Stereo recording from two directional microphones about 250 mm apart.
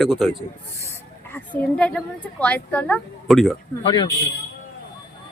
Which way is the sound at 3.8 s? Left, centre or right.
Centre.